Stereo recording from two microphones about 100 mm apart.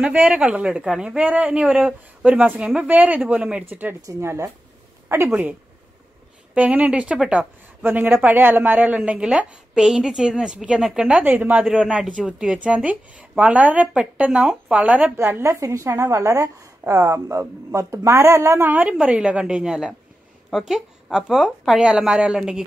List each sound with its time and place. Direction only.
0.0 s a woman's voice: 10° right (ahead or behind)
4.0 s a woman's voice: 30° right (ahead or behind)
15.1 s a woman's voice: 25° right (ahead or behind)
18.7 s a woman's voice: 15° right (ahead or behind)